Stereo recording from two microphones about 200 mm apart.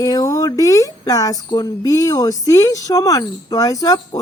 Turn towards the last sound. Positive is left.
turn(degrees=15)  # may be behind; listen again after turning